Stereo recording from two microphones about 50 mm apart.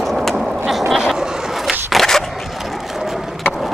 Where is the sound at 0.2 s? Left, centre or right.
Centre.